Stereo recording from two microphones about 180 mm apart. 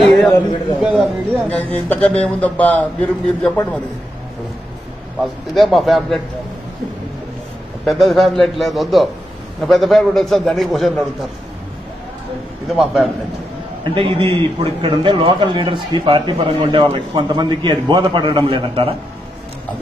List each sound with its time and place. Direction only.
0.8 s a man's voice: 5° right (ahead or behind)
5.2 s a man's voice: centre (ahead or behind)
7.8 s a man's voice: centre (ahead or behind)
12.6 s a man's voice: centre (ahead or behind)
13.8 s a man's voice: 30° right (ahead or behind)